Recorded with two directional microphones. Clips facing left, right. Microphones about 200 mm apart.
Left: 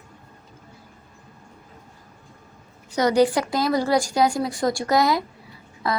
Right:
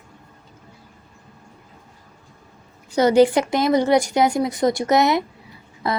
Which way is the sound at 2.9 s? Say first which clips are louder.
Right 4 dB; 25° right (ahead or behind).